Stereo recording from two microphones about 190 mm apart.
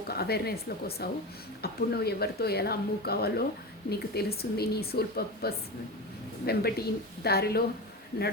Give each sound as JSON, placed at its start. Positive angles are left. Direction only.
{"t": 0.1, "sound": "speech", "side_deg": 55}